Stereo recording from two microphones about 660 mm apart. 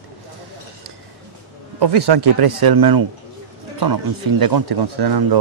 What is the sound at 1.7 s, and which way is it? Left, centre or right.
Speech, right.